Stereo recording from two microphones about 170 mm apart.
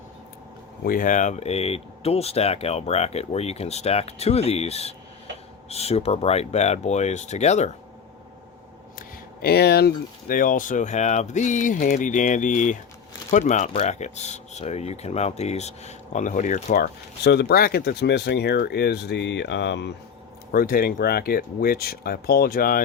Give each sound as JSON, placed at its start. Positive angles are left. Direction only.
{"t": 0.9, "sound": "speech", "side_deg": 50}
{"t": 9.0, "sound": "speech", "side_deg": 65}
{"t": 16.7, "sound": "speech", "side_deg": 70}
{"t": 20.5, "sound": "speech", "side_deg": 60}